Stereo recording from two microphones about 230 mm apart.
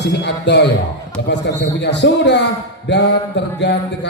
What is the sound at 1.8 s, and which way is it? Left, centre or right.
A man's voice, left.